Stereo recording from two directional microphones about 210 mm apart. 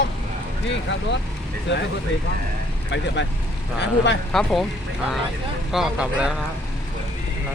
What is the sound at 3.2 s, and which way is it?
Speech, 60° left (ahead or behind).